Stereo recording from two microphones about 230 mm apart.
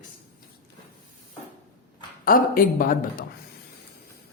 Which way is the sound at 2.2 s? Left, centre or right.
Left.